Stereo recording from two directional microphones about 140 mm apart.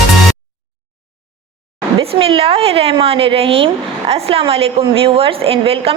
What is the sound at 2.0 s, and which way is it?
A woman's voice, 40° right (ahead or behind).